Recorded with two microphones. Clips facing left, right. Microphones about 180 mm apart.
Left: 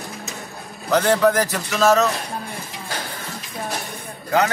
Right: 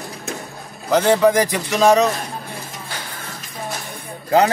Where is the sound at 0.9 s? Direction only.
10° right (ahead or behind).